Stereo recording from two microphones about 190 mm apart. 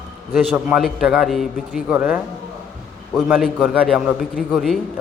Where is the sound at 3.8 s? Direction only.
5° left (ahead or behind).